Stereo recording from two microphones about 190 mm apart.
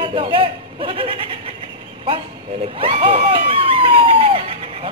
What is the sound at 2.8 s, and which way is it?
A woman's voice, 30° right (ahead or behind).